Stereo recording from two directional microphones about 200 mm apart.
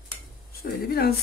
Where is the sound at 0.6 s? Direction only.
50° left (ahead or behind).